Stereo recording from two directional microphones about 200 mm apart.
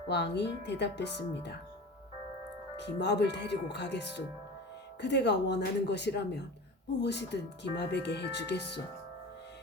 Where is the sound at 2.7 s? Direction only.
60° left (ahead or behind).